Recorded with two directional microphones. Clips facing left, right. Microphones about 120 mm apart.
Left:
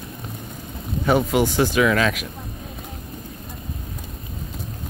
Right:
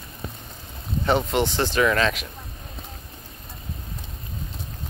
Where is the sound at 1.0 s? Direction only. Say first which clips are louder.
Left 3 dB; 5° left (ahead or behind).